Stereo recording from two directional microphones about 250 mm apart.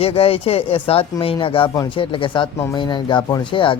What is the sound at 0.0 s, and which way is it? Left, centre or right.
Speech, left.